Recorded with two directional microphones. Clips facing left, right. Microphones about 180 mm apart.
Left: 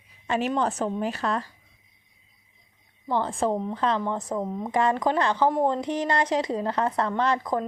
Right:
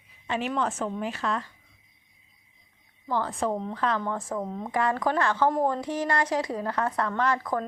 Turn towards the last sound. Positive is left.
turn(degrees=20)  # may be behind; listen again after turning